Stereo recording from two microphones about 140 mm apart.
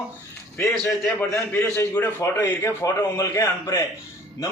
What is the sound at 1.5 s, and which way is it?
A man's voice, 15° left (ahead or behind).